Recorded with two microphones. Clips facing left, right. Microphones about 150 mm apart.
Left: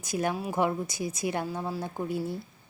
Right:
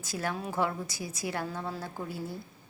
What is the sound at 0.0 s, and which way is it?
Speech, 20° left (ahead or behind).